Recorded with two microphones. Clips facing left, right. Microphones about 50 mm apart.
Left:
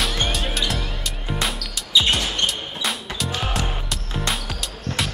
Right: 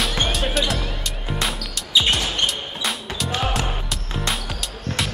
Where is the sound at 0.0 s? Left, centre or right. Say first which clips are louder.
Right 1 dB; centre.